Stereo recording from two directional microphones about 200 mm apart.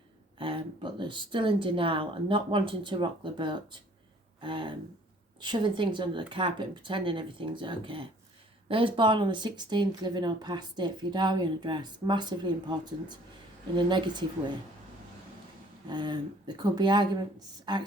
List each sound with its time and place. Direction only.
0.3 s speech: 25° right (ahead or behind)
15.9 s speech: 20° right (ahead or behind)